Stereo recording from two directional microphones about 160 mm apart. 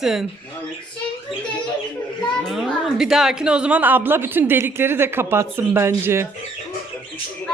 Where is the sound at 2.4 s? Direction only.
Centre (ahead or behind).